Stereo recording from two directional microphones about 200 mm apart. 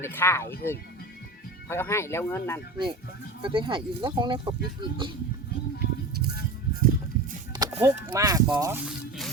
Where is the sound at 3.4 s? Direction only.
25° right (ahead or behind).